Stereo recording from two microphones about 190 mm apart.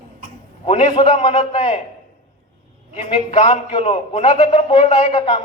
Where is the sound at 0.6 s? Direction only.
35° left (ahead or behind).